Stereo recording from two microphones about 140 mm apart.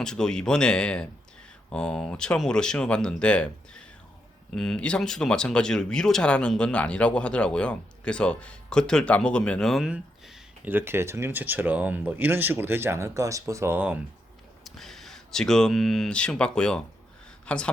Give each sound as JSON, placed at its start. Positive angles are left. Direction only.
{"t": 0.0, "sound": "speech", "side_deg": 5}
{"t": 14.6, "sound": "speech", "side_deg": 0}